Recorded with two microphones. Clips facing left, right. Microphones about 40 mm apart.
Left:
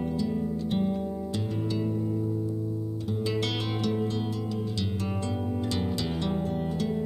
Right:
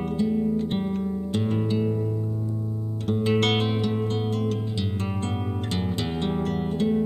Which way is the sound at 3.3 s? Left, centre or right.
Right.